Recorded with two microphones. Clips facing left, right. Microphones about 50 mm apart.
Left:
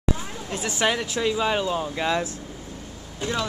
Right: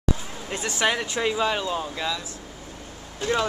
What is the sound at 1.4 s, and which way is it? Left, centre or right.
Speech, centre.